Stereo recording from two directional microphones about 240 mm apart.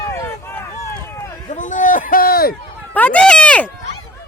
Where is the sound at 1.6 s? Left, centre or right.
Left.